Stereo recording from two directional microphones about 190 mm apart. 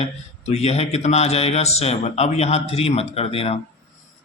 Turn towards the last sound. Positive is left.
turn(degrees=30)  # may be behind; listen again after turning